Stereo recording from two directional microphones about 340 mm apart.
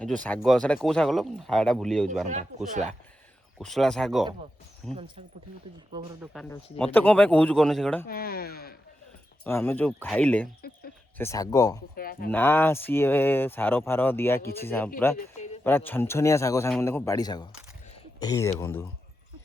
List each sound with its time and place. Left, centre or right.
0.0 s speech: centre
2.2 s speech: right
3.6 s speech: centre
6.3 s speech: centre
8.0 s speech: left
9.4 s speech: centre
11.9 s speech: left
12.3 s speech: centre
15.1 s a sound: left
15.6 s speech: centre